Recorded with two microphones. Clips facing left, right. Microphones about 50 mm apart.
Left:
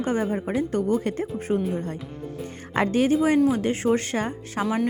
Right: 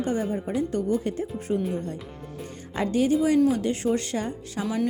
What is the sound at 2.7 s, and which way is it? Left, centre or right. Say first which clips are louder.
Speech: left 2 dB; left.